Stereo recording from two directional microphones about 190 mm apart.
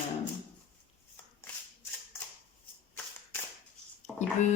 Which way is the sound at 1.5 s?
5° left (ahead or behind).